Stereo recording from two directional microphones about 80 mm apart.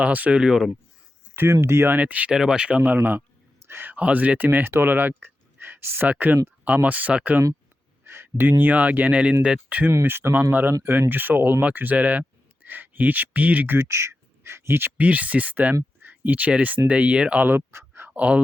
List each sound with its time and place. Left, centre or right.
0.0 s speech: centre
1.6 s speech: right
2.0 s speech: centre
2.3 s speech: centre
8.0 s speech: right
9.9 s speech: right
13.7 s speech: right
18.1 s speech: centre